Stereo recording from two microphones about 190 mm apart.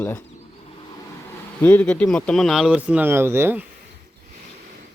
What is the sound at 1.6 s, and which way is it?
Speech, 5° left (ahead or behind).